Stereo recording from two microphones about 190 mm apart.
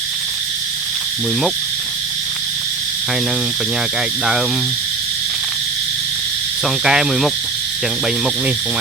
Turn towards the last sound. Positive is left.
turn(degrees=0)  # may be behind; listen again after turning